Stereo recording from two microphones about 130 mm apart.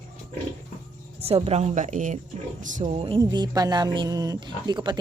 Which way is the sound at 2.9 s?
50° right (ahead or behind).